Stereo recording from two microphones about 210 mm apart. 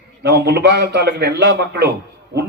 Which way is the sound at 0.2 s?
50° right (ahead or behind).